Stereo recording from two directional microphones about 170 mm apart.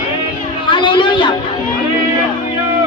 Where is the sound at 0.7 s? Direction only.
30° left (ahead or behind).